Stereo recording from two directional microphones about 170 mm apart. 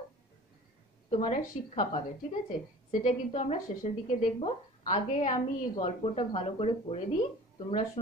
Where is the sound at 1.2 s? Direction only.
40° left (ahead or behind).